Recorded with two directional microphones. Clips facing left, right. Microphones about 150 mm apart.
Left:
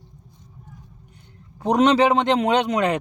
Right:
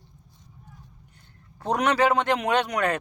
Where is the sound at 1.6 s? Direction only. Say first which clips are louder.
Left 6 dB; 20° left (ahead or behind).